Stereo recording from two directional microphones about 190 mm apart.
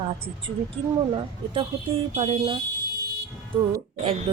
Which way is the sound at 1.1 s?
30° right (ahead or behind).